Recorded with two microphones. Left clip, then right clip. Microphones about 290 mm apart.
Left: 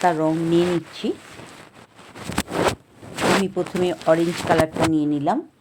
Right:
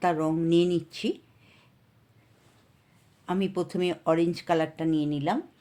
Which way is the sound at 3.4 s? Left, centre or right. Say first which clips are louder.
Left 6 dB; centre.